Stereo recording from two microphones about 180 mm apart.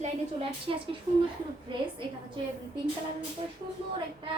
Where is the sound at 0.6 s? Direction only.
30° right (ahead or behind).